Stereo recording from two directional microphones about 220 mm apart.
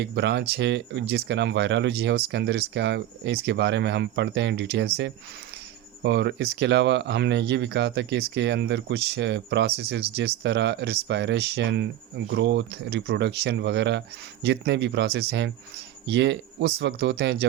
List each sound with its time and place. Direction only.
0.0 s speech: 50° right (ahead or behind)
6.0 s speech: 50° right (ahead or behind)